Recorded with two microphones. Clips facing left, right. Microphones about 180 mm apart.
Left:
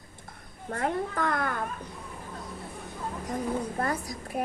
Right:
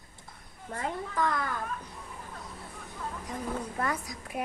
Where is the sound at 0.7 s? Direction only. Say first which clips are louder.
Left 5 dB; 60° left (ahead or behind).